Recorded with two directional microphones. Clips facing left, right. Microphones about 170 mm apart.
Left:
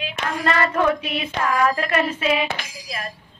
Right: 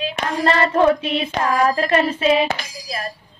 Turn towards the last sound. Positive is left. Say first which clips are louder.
# right 4 dB
turn(degrees=-35)  # may be behind; listen again after turning